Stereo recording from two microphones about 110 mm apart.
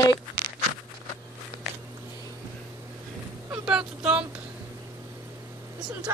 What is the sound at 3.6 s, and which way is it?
Speech, 10° right (ahead or behind).